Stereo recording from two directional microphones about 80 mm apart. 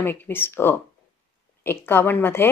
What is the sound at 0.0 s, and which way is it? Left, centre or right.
A woman's voice, left.